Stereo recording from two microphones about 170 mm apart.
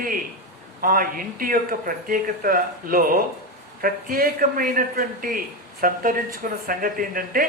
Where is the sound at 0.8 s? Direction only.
55° right (ahead or behind).